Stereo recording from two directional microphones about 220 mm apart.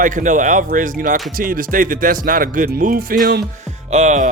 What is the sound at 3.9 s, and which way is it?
Speech, 30° right (ahead or behind).